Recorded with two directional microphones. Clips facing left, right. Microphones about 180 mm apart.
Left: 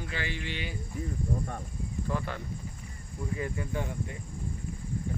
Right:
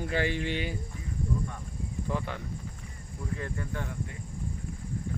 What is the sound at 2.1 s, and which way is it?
Speech, 15° right (ahead or behind).